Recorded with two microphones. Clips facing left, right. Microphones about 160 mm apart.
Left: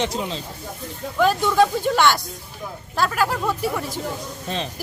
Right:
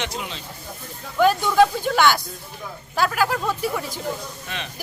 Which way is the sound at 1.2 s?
Centre (ahead or behind).